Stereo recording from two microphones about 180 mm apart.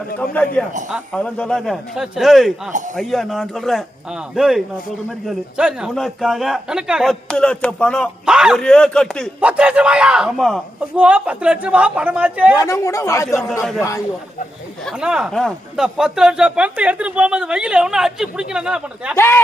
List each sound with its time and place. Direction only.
0.2 s speech: 5° left (ahead or behind)
9.4 s a man's voice: 5° right (ahead or behind)
12.5 s speech: 15° left (ahead or behind)
13.5 s speech: centre (ahead or behind)
14.8 s speech: 5° right (ahead or behind)
19.1 s speech: 15° left (ahead or behind)